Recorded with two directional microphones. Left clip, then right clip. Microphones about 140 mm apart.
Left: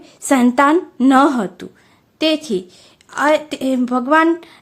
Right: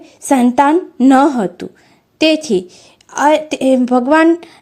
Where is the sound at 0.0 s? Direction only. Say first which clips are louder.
Right 2 dB; 10° right (ahead or behind).